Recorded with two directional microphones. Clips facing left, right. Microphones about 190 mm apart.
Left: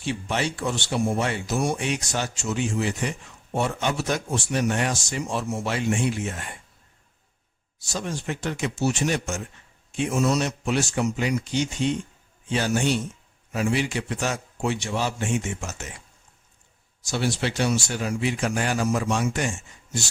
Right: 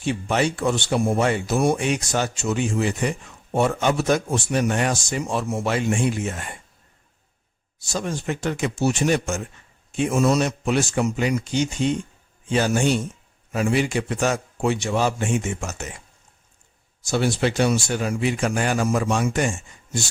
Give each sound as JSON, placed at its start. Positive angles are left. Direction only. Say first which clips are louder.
{"t": 0.0, "sound": "speech", "louder": "right 5 dB", "side_deg": -50}
{"t": 7.9, "sound": "speech", "louder": "right 3 dB", "side_deg": -50}
{"t": 17.0, "sound": "speech", "louder": "right 5 dB", "side_deg": -55}